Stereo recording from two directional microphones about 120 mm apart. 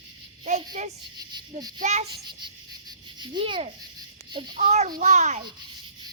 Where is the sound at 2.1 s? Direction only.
40° right (ahead or behind).